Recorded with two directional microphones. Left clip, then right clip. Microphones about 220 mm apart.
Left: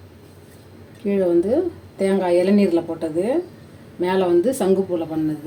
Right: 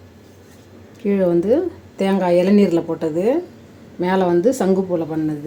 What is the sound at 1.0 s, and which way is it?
Speech, 30° right (ahead or behind).